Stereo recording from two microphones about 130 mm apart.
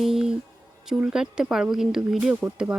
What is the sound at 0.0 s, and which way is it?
Music, 5° right (ahead or behind).